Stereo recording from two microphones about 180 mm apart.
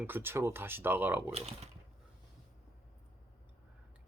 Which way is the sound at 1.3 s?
35° right (ahead or behind).